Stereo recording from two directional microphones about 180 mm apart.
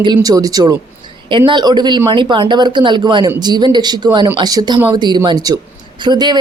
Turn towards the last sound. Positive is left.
turn(degrees=-25)  # may be behind; listen again after turning